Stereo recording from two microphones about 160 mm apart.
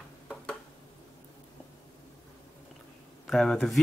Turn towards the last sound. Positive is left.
turn(degrees=0)  # may be behind; listen again after turning